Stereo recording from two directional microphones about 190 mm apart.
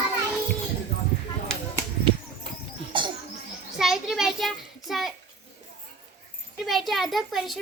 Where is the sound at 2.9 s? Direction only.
25° right (ahead or behind).